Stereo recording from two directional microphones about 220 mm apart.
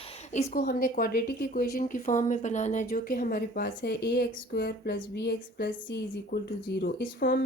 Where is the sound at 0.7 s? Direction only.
40° left (ahead or behind).